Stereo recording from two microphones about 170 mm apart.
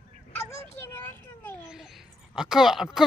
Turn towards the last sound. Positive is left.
turn(degrees=0)  # may be behind; listen again after turning